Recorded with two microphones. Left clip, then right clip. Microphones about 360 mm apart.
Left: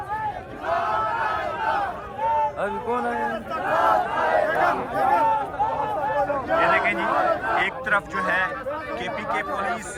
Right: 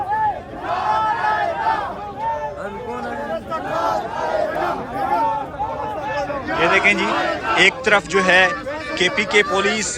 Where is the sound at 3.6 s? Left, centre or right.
Left.